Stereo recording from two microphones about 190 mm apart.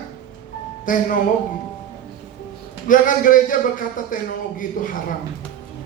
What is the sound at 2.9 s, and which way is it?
A man's voice, 45° left (ahead or behind).